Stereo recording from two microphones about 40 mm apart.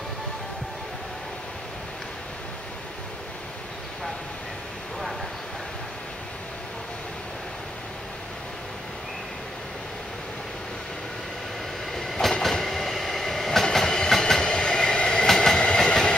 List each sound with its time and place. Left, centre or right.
11.9 s train: centre